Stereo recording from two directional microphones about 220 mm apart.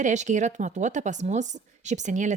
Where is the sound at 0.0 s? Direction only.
35° right (ahead or behind).